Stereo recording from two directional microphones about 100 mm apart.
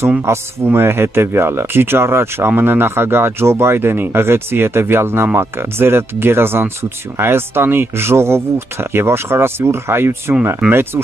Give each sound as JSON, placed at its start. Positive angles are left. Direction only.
{"t": 0.2, "sound": "speech", "side_deg": -25}